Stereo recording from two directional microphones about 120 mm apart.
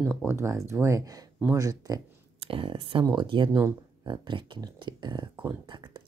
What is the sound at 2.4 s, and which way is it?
Speech, 50° right (ahead or behind).